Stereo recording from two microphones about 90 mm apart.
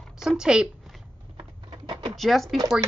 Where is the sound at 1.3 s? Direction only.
55° right (ahead or behind).